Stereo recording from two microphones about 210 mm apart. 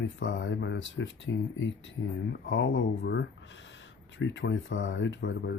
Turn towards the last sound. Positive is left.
turn(degrees=60)  # may be behind; listen again after turning